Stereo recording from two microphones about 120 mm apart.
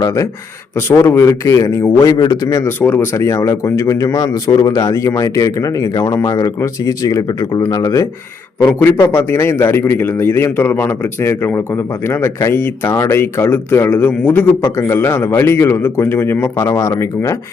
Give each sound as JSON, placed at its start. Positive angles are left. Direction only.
{"t": 0.0, "sound": "a man's voice", "side_deg": 25}
{"t": 2.6, "sound": "a man's voice", "side_deg": 20}
{"t": 8.6, "sound": "a man's voice", "side_deg": 20}